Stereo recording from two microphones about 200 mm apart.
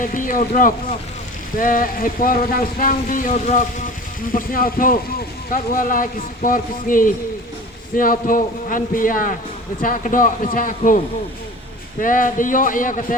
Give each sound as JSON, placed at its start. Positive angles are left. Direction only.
{"t": 0.0, "sound": "a man's voice", "side_deg": 45}